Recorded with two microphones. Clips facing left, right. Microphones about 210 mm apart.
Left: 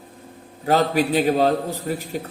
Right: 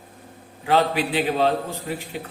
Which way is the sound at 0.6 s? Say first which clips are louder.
Left 2 dB; 40° left (ahead or behind).